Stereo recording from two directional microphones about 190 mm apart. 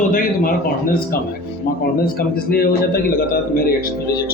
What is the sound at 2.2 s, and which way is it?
Speech, 50° left (ahead or behind).